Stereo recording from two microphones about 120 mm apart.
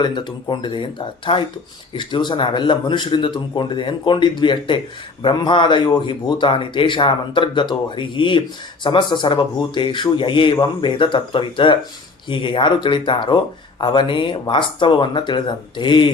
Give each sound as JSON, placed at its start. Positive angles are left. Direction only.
{"t": 0.0, "sound": "speech", "side_deg": 40}